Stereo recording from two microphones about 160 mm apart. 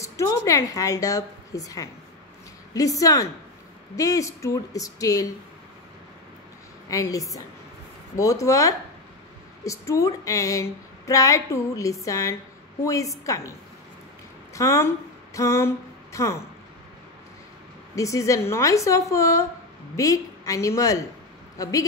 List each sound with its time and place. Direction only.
0.0 s a woman's voice: 20° left (ahead or behind)
6.9 s a woman's voice: 20° left (ahead or behind)
15.3 s a sound: 15° left (ahead or behind)
17.9 s speech: 20° left (ahead or behind)